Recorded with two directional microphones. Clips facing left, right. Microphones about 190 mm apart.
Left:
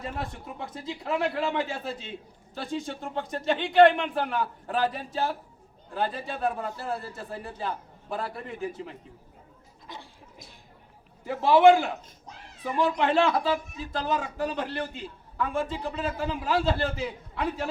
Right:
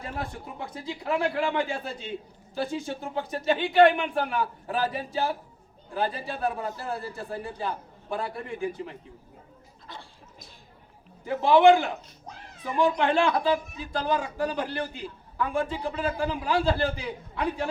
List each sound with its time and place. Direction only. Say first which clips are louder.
0.0 s speech: even; centre (ahead or behind)
9.8 s gargling: left 1 dB; 15° left (ahead or behind)
11.3 s speech: even; centre (ahead or behind)